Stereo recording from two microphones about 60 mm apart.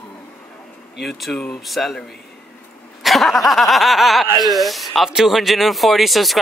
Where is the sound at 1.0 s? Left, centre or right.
Centre.